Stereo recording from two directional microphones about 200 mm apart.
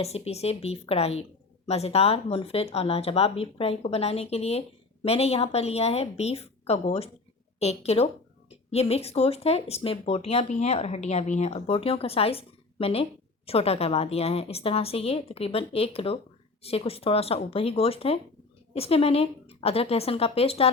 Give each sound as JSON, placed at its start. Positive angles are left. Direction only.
{"t": 0.0, "sound": "a woman's voice", "side_deg": 30}